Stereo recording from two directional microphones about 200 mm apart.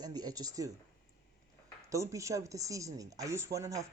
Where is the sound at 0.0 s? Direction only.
20° right (ahead or behind).